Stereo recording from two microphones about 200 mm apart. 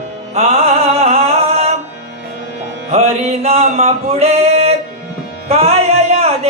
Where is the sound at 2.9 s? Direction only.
30° right (ahead or behind).